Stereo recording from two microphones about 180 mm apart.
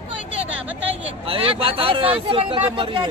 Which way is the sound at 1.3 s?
30° right (ahead or behind).